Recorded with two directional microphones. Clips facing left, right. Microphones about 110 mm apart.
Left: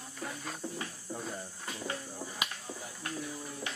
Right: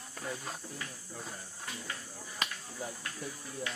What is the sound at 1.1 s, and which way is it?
Speech, 30° left (ahead or behind).